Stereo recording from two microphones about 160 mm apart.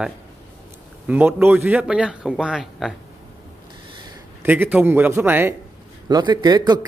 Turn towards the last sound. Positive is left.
turn(degrees=-25)  # may be behind; listen again after turning